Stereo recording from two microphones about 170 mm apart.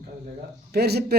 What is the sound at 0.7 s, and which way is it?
Speech, 70° right (ahead or behind).